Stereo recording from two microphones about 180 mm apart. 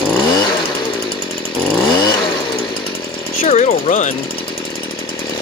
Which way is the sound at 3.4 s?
40° left (ahead or behind).